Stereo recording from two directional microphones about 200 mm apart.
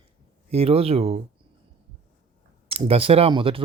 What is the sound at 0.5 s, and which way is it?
Speech, 30° right (ahead or behind).